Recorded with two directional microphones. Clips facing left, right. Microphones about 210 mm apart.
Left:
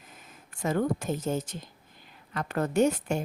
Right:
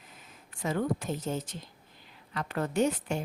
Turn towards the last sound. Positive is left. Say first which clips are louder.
# left 3 dB
turn(degrees=45)  # may be behind; listen again after turning